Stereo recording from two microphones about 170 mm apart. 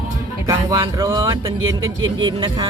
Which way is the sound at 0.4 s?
25° right (ahead or behind).